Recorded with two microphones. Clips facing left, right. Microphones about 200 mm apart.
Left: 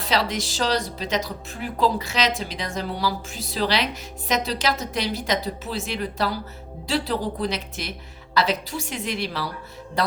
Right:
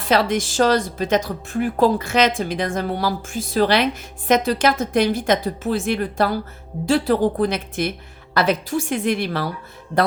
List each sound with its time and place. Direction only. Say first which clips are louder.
0.0 s speech: right 6 dB; 50° right (ahead or behind)